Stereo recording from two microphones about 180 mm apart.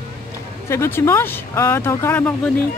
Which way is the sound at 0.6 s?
15° left (ahead or behind).